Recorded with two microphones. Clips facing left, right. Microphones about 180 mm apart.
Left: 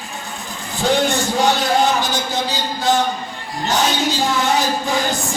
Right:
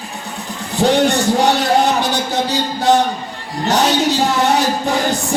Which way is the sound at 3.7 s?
65° right (ahead or behind).